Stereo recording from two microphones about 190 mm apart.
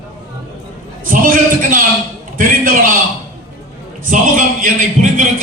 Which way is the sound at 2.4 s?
45° right (ahead or behind).